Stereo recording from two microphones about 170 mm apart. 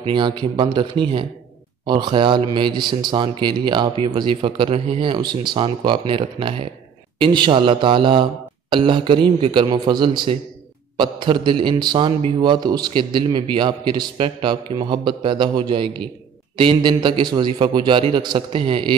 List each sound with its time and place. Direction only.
0.0 s a man's voice: 30° right (ahead or behind)